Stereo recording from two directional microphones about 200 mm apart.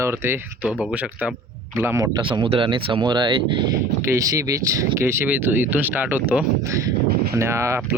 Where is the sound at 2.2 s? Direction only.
25° right (ahead or behind).